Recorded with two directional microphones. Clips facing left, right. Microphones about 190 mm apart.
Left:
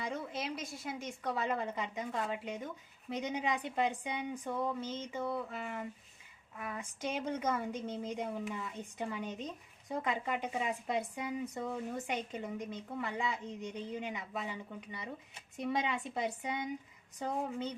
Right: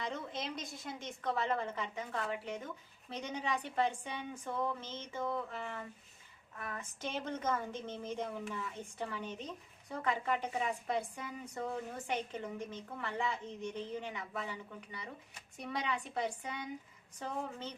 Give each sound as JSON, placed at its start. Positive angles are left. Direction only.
{"t": 0.0, "sound": "a woman's voice", "side_deg": 10}